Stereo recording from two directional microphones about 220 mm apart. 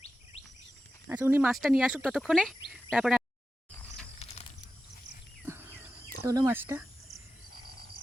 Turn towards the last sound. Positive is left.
turn(degrees=-10)  # may be behind; listen again after turning